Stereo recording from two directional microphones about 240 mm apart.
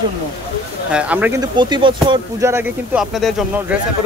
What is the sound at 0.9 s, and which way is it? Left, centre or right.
Speech, centre.